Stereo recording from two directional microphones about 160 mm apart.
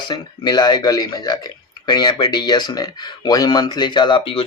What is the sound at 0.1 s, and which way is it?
Speech, 25° left (ahead or behind).